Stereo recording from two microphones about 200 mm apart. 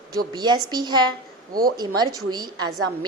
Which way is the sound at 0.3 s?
20° right (ahead or behind).